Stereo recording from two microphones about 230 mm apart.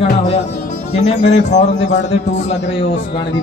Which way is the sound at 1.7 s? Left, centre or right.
Left.